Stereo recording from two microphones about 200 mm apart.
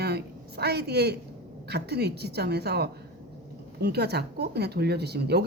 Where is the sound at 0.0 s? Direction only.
55° right (ahead or behind).